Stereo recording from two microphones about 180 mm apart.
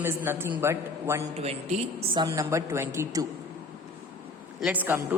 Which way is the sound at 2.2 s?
15° right (ahead or behind).